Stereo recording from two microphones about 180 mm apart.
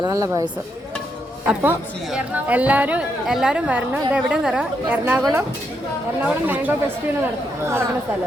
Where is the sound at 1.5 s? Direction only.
5° right (ahead or behind).